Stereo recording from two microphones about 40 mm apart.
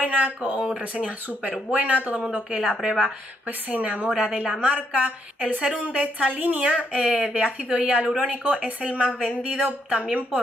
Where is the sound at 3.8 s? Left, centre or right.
Right.